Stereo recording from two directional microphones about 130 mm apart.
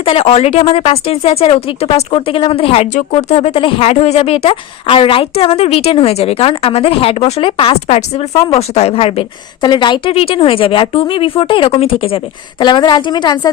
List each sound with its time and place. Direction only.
0.0 s speech: 45° left (ahead or behind)
2.9 s speech: 55° left (ahead or behind)
9.6 s speech: 35° left (ahead or behind)